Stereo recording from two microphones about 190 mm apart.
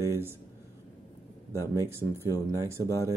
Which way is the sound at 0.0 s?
15° right (ahead or behind).